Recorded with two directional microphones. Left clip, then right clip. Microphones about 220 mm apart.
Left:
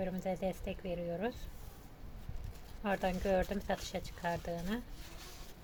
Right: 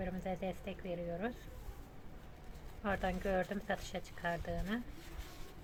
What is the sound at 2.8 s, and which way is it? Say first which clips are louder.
A woman's voice: left 2 dB; 30° left (ahead or behind).